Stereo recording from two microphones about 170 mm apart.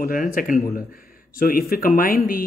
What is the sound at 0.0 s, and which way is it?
Speech, 55° left (ahead or behind).